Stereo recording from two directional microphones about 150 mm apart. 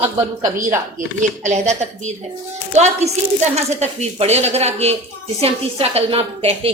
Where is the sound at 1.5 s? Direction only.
50° right (ahead or behind).